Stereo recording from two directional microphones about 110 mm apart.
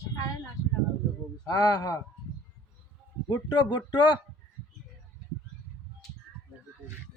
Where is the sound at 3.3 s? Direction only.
45° left (ahead or behind).